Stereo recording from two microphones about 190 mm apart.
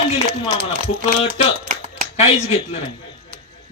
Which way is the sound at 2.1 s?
30° left (ahead or behind).